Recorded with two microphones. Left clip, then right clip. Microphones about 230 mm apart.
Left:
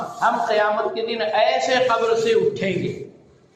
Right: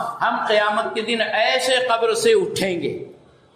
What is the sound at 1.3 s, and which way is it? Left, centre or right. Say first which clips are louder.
A man's voice: left 1 dB; right.